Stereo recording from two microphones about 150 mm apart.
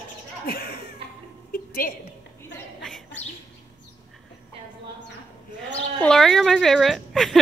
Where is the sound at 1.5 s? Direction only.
70° left (ahead or behind).